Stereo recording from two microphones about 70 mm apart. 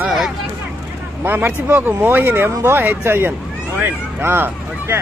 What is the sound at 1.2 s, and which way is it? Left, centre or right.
Speech, right.